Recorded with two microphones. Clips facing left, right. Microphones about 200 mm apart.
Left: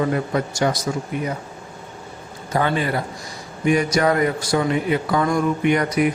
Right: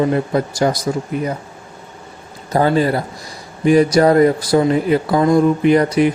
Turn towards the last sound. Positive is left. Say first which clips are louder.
# right 5 dB
turn(degrees=-30)  # may be behind; listen again after turning